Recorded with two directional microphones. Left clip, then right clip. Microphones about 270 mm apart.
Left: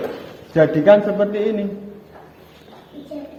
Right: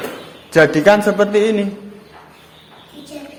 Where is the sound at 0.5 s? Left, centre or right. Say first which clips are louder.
Right 2 dB; right.